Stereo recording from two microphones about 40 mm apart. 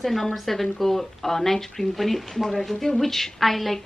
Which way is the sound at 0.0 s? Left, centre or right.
Centre.